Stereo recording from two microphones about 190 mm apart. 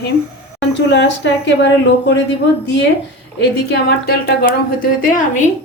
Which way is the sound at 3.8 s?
60° left (ahead or behind).